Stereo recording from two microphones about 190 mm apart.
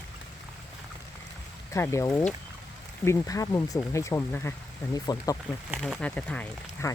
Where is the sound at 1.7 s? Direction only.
15° left (ahead or behind).